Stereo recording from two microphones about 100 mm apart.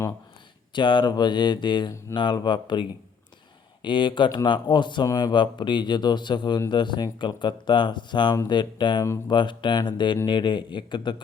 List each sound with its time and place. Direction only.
0.7 s speech: 50° left (ahead or behind)
3.8 s speech: 50° left (ahead or behind)